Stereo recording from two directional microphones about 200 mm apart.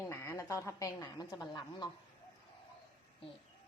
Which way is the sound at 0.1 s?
15° left (ahead or behind).